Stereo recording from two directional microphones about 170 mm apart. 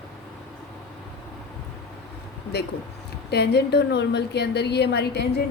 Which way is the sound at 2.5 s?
75° left (ahead or behind).